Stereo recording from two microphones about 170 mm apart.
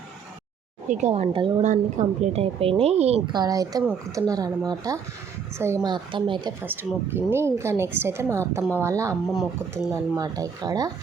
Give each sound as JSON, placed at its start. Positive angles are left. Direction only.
{"t": 0.9, "sound": "a woman's voice", "side_deg": -40}
{"t": 1.6, "sound": "a woman's voice", "side_deg": -45}
{"t": 3.3, "sound": "speech", "side_deg": -20}
{"t": 6.6, "sound": "speech", "side_deg": -10}